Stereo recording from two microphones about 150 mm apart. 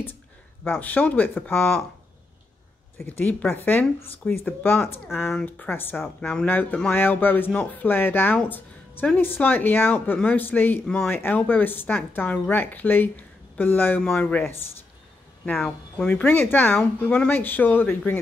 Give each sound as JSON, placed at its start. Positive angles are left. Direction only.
{"t": 0.7, "sound": "speech", "side_deg": 10}
{"t": 3.0, "sound": "speech", "side_deg": 15}